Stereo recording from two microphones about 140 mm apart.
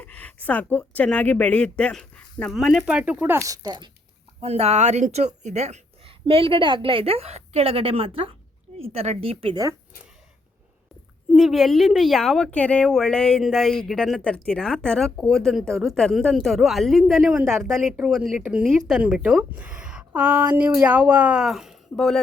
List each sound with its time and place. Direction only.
0.0 s speech: 10° left (ahead or behind); by 3.8 s 25° right (ahead or behind)
4.4 s a woman's voice: 45° right (ahead or behind)
11.3 s speech: centre (ahead or behind)